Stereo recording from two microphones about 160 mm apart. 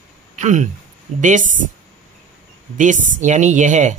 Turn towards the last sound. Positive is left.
turn(degrees=-50)  # may be behind; listen again after turning